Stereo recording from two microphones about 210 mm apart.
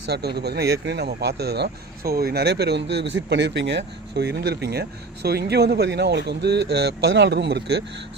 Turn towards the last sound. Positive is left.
turn(degrees=-55)  # may be behind; listen again after turning